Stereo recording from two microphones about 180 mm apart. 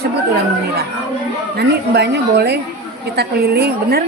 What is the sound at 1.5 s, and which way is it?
A woman's voice, 65° right (ahead or behind).